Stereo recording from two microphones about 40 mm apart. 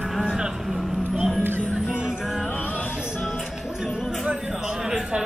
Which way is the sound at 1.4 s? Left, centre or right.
Right.